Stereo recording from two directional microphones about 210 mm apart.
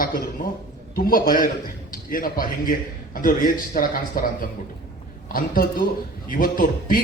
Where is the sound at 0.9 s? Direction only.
45° left (ahead or behind).